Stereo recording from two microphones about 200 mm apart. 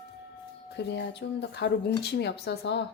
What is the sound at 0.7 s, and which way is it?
Speech, 60° left (ahead or behind).